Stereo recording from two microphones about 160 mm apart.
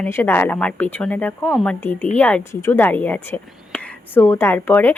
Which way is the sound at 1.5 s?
Centre (ahead or behind).